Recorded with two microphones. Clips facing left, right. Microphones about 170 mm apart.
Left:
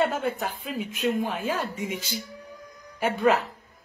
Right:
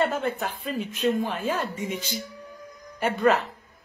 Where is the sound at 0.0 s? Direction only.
Centre (ahead or behind).